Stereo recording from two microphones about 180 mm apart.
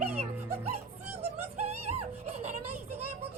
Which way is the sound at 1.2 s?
35° right (ahead or behind).